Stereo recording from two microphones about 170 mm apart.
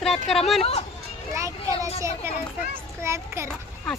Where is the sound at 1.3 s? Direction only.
20° right (ahead or behind).